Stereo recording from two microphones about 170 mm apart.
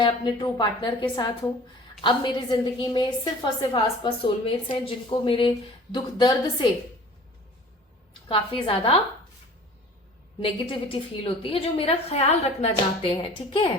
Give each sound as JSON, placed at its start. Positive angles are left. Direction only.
{"t": 0.0, "sound": "a woman's voice", "side_deg": 25}
{"t": 8.3, "sound": "a woman's voice", "side_deg": 30}
{"t": 10.4, "sound": "a woman's voice", "side_deg": 30}